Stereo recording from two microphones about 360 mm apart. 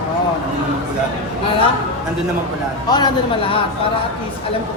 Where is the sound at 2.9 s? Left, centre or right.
Centre.